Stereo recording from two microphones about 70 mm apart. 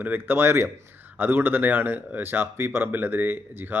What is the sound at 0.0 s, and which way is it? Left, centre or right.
Speech, right.